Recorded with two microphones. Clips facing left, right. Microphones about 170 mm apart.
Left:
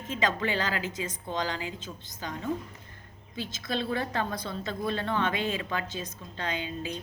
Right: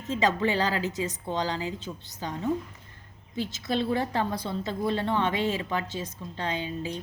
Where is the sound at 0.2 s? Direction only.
30° right (ahead or behind).